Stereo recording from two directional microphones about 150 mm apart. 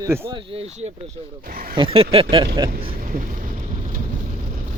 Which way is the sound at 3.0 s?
60° right (ahead or behind).